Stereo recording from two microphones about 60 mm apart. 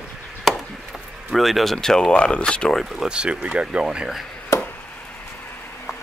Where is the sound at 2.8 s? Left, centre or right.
Centre.